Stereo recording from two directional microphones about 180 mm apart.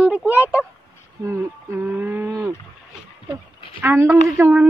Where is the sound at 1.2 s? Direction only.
15° right (ahead or behind).